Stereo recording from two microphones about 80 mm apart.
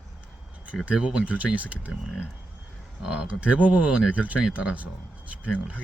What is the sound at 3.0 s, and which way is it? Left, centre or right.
Speech, centre.